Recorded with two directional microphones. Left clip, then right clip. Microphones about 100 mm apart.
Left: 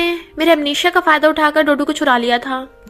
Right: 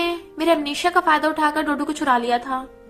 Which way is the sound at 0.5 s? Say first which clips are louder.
Left 4 dB; 45° left (ahead or behind).